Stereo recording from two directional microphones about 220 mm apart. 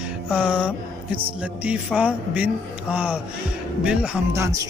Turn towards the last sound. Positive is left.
turn(degrees=-15)  # may be behind; listen again after turning